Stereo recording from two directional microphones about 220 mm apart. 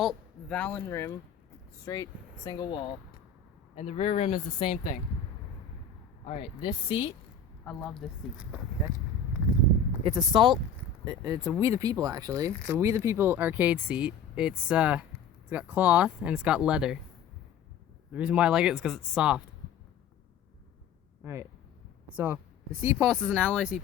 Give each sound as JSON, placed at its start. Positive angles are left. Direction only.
{"t": 0.0, "sound": "speech", "side_deg": 5}
{"t": 6.2, "sound": "speech", "side_deg": 25}
{"t": 7.6, "sound": "speech", "side_deg": 5}
{"t": 10.0, "sound": "speech", "side_deg": -20}
{"t": 18.1, "sound": "speech", "side_deg": -5}
{"t": 21.2, "sound": "speech", "side_deg": -15}